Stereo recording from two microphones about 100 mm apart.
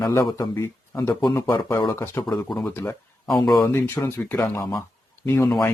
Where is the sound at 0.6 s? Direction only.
25° left (ahead or behind).